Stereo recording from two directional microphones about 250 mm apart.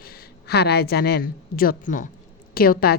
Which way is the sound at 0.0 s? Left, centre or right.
Left.